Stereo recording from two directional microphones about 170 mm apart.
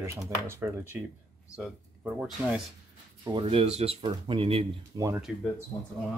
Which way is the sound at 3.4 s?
35° right (ahead or behind).